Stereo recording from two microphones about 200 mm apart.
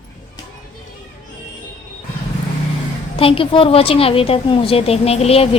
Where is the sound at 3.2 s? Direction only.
25° left (ahead or behind).